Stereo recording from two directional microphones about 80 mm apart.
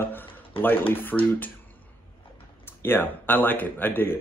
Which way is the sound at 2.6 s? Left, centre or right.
Left.